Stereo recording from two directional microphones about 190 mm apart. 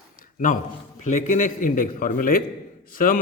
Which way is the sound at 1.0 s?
40° left (ahead or behind).